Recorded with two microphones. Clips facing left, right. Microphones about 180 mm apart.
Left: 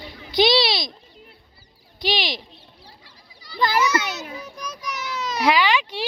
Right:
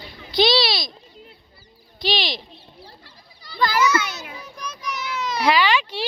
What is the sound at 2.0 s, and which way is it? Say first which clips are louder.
Speech: even; 15° left (ahead or behind).